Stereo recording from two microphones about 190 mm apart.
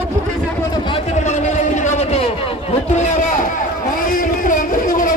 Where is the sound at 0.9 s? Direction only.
40° left (ahead or behind).